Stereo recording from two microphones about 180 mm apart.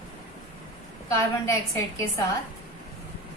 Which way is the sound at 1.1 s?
15° left (ahead or behind).